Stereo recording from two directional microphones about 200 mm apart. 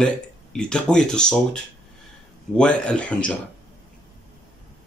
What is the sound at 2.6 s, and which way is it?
Speech, 5° left (ahead or behind).